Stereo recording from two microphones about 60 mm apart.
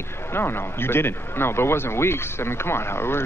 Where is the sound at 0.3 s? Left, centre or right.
Left.